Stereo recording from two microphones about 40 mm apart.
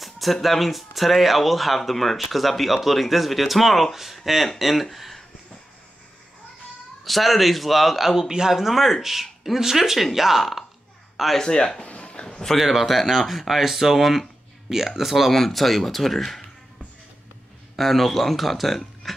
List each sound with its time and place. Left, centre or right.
0.0 s speech: centre
4.9 s a sound: centre
7.1 s speech: centre
8.3 s speech: centre
8.5 s speech: centre
11.3 s speech: centre
11.9 s a sound: left
12.5 s speech: centre
17.7 s speech: centre